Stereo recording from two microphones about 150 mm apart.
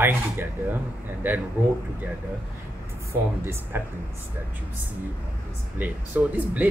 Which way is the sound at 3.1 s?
15° right (ahead or behind).